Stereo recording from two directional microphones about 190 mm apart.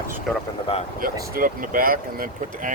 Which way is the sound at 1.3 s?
45° right (ahead or behind).